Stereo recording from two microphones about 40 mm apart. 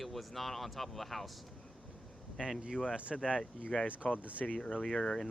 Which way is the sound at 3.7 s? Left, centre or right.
Centre.